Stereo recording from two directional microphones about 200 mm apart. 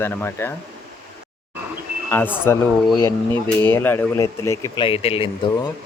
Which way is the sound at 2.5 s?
10° left (ahead or behind).